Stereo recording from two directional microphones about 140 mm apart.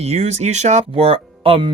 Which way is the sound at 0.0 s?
50° right (ahead or behind).